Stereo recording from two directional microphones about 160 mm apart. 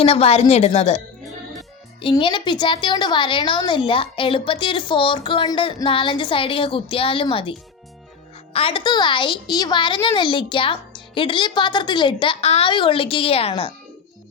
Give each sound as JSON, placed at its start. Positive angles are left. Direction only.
{"t": 0.0, "sound": "a woman's voice", "side_deg": 40}
{"t": 8.5, "sound": "a woman's voice", "side_deg": 35}